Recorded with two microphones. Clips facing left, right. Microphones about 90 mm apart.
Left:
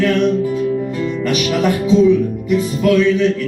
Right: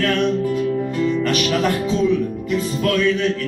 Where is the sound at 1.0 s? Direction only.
10° left (ahead or behind).